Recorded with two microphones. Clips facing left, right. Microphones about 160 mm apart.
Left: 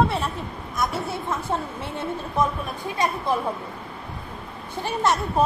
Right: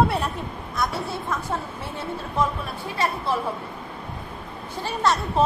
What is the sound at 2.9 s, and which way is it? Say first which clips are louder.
Speech: left 1 dB; 20° left (ahead or behind).